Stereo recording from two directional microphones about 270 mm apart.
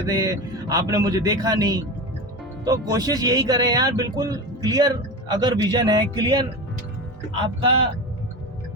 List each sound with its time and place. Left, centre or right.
0.0 s speech: centre